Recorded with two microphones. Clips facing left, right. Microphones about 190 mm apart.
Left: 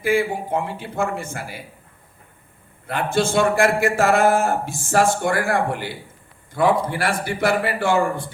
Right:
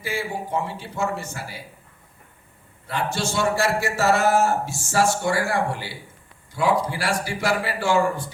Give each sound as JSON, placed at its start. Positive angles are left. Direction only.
{"t": 0.0, "sound": "a man's voice", "side_deg": 55}
{"t": 2.8, "sound": "a man's voice", "side_deg": 55}